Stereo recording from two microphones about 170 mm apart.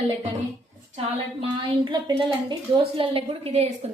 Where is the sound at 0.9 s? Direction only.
35° right (ahead or behind).